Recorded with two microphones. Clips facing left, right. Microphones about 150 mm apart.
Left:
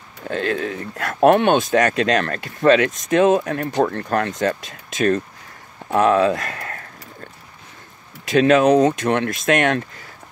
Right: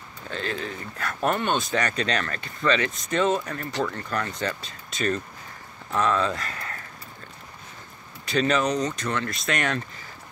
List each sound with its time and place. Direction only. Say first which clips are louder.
0.2 s speech: left 8 dB; 55° left (ahead or behind)
1.6 s speech: left 9 dB; 50° left (ahead or behind)
8.4 s speech: left 10 dB; 60° left (ahead or behind)